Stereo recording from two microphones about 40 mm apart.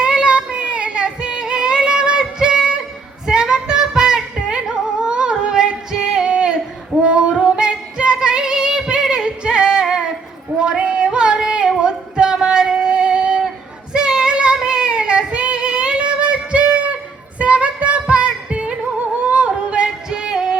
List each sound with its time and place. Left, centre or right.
0.0 s child singing: right
1.0 s singing: right
7.0 s female singing: right
10.6 s a sound: right
11.8 s female singing: right
13.9 s child singing: centre
17.3 s music: right
19.3 s yodeling: right
20.1 s female singing: right